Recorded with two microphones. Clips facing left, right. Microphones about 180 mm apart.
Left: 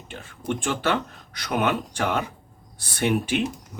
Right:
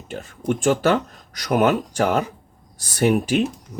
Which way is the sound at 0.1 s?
40° right (ahead or behind).